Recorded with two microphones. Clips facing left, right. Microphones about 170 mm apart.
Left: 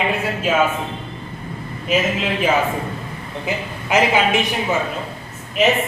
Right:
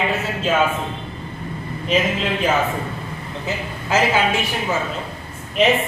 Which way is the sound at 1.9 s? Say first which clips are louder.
Even; 5° left (ahead or behind).